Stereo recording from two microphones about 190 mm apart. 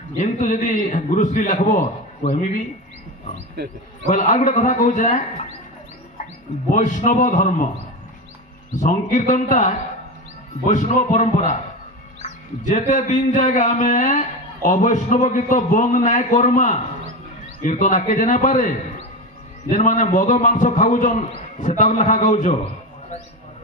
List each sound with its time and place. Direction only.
0.2 s speech: 40° left (ahead or behind)
4.1 s speech: 40° left (ahead or behind)
6.7 s speech: 40° left (ahead or behind)
8.7 s speech: 40° left (ahead or behind)
19.7 s speech: 40° left (ahead or behind)